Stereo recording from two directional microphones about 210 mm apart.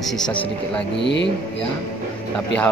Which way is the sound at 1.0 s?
55° left (ahead or behind).